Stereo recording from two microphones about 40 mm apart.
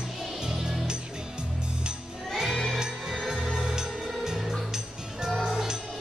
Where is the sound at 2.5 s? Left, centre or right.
Centre.